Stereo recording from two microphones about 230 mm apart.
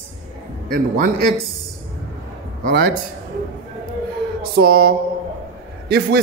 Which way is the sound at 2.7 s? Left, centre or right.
Right.